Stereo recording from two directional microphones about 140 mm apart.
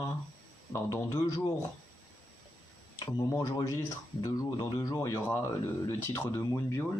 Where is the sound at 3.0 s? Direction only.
25° left (ahead or behind).